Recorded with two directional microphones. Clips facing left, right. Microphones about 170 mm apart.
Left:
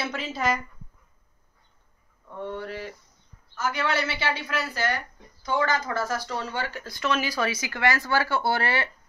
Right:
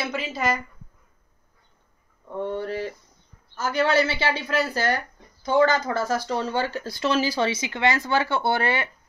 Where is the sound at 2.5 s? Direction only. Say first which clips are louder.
Right 6 dB; 30° right (ahead or behind).